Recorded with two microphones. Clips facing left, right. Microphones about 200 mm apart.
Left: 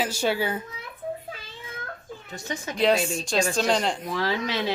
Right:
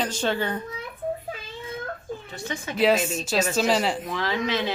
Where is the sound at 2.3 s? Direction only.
40° left (ahead or behind).